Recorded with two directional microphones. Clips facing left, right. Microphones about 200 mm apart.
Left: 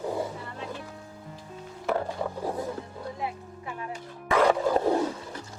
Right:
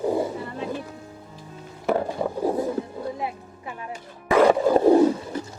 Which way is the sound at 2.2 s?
35° right (ahead or behind).